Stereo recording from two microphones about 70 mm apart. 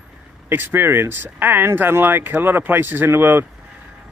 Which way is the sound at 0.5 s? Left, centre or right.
Right.